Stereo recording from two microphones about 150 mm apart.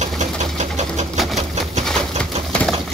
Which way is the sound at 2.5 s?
10° left (ahead or behind).